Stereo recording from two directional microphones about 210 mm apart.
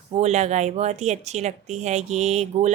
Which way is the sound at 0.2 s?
30° right (ahead or behind).